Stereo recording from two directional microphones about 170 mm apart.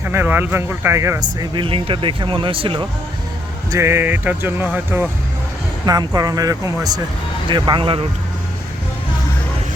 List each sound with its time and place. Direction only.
0.0 s speech: 10° right (ahead or behind); by 2.8 s 30° right (ahead or behind)
3.7 s speech: 15° right (ahead or behind)
5.8 s speech: 20° right (ahead or behind)